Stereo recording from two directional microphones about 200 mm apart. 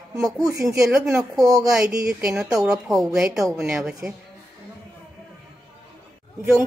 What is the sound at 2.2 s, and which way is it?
A woman's voice, 5° right (ahead or behind).